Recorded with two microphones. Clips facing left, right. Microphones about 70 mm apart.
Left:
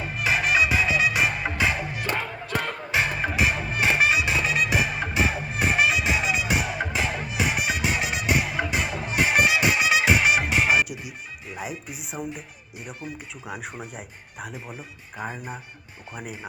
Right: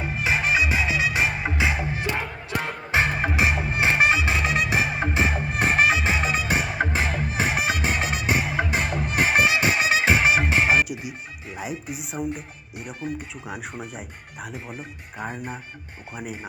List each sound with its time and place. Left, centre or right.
0.0 s music: right
2.9 s music: right
8.7 s music: right
10.8 s music: centre
13.0 s speech: right
13.5 s speech: centre
15.2 s speech: centre